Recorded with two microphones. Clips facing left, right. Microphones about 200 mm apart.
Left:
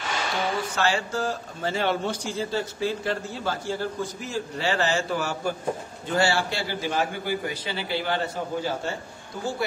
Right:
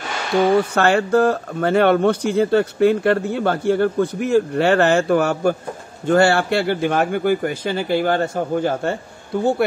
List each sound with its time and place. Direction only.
0.5 s speech: 60° right (ahead or behind)